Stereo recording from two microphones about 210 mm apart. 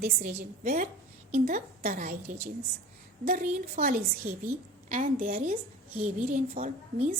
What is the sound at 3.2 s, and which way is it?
Speech, 40° right (ahead or behind).